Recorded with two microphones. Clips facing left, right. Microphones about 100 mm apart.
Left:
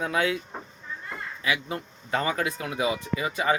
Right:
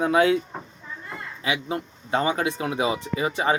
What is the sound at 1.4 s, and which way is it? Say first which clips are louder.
Speech: right 2 dB; 25° right (ahead or behind).